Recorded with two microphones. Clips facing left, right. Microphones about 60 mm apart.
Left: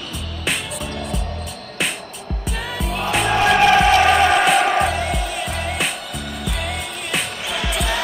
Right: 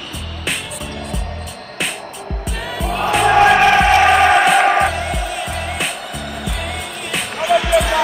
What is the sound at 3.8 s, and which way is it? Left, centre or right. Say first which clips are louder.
Music: right 2 dB; right.